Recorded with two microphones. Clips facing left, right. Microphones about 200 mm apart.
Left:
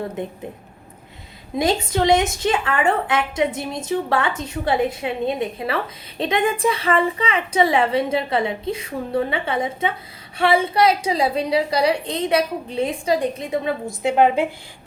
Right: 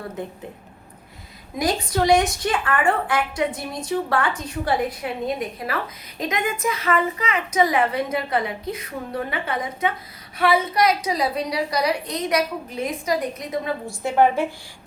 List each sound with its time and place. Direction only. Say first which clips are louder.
1.5 s a woman's voice: left 2 dB; 25° left (ahead or behind)